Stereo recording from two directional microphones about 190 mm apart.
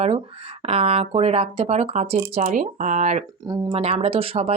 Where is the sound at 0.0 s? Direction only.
30° right (ahead or behind).